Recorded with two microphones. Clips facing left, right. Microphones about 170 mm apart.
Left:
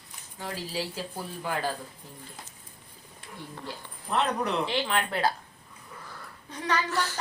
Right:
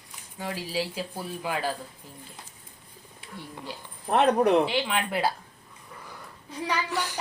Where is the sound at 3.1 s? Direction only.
10° right (ahead or behind).